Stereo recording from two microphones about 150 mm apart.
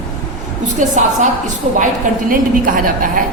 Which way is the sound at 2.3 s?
65° right (ahead or behind).